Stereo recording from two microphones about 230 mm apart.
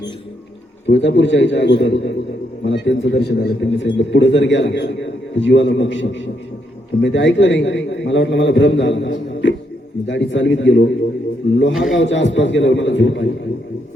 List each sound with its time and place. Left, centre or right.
0.9 s a man's voice: left
11.7 s a man's voice: centre
11.9 s a man's voice: left